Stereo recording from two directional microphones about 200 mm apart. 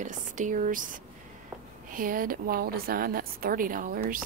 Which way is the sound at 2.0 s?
45° right (ahead or behind).